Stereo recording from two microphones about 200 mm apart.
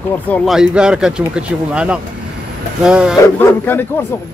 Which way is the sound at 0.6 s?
5° right (ahead or behind).